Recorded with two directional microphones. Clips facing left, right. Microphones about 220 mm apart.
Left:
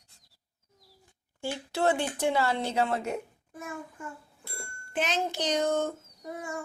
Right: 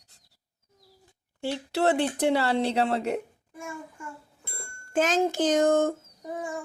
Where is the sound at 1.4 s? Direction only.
70° right (ahead or behind).